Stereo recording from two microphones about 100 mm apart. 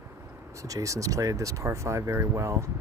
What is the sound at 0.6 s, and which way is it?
Speech, 35° right (ahead or behind).